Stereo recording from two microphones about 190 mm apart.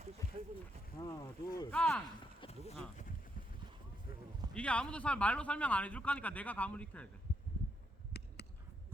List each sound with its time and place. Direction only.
1.0 s speech: 20° left (ahead or behind)
1.7 s speech: 5° left (ahead or behind)
2.4 s a sound: 25° left (ahead or behind)
4.5 s speech: 5° left (ahead or behind)